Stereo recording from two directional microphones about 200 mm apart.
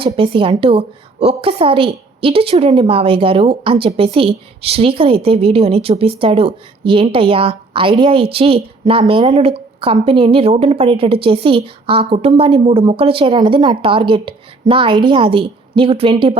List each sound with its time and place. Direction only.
0.0 s a woman's voice: 25° right (ahead or behind)